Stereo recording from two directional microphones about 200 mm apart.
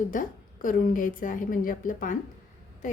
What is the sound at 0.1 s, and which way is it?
A woman's voice, 40° left (ahead or behind).